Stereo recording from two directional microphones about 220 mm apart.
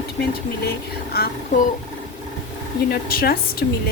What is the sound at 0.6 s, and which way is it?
Speech, 45° left (ahead or behind).